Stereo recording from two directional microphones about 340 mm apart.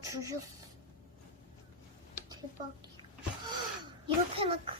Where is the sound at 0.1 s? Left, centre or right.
Centre.